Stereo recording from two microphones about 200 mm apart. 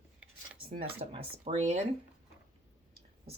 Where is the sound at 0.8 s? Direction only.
30° right (ahead or behind).